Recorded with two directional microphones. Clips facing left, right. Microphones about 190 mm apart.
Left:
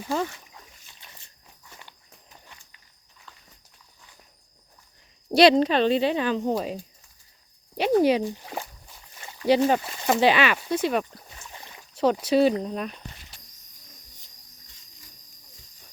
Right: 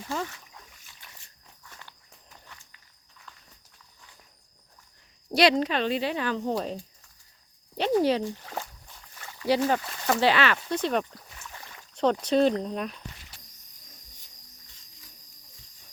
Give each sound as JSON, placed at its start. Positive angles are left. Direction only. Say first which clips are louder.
{"t": 0.9, "sound": "walk", "louder": "left 2 dB", "side_deg": 25}
{"t": 5.3, "sound": "speech", "louder": "left 5 dB", "side_deg": 30}
{"t": 11.3, "sound": "boat", "louder": "left 1 dB", "side_deg": 20}
{"t": 11.9, "sound": "speech", "louder": "left 2 dB", "side_deg": 5}